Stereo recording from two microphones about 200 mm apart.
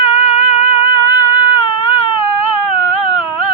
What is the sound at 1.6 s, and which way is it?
Baby cry, 25° left (ahead or behind).